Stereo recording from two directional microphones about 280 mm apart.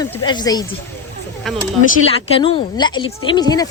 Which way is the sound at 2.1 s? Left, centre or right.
Centre.